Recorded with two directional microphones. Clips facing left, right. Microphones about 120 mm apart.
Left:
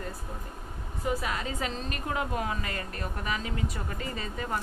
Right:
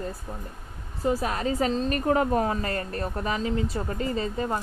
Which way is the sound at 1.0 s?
30° right (ahead or behind).